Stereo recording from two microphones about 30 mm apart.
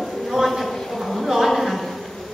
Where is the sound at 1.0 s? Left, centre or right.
Centre.